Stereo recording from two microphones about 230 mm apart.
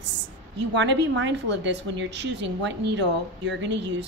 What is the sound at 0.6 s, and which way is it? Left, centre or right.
A woman's voice, right.